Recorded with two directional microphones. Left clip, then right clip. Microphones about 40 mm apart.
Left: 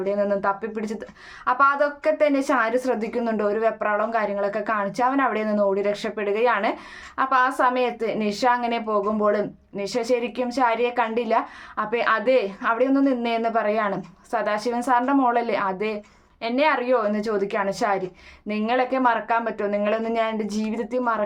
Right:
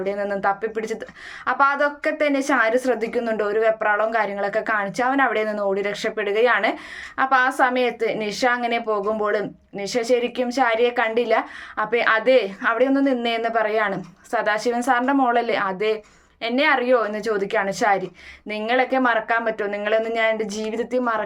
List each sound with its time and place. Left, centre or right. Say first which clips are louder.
0.0 s a woman's voice: even; left